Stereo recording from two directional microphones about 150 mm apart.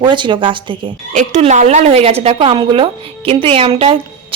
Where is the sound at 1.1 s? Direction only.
50° right (ahead or behind).